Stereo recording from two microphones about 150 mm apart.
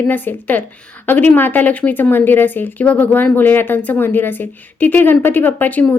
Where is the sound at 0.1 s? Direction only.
10° left (ahead or behind).